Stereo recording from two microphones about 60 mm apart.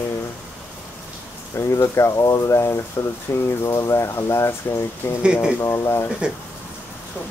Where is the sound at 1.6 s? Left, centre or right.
Left.